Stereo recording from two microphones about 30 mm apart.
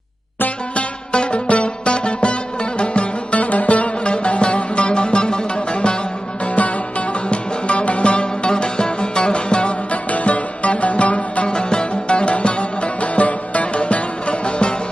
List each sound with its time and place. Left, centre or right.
0.8 s music: left
3.3 s music: left
7.3 s music: left
9.9 s music: left
11.4 s music: left